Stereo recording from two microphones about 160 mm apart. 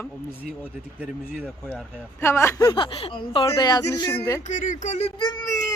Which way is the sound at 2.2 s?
15° left (ahead or behind).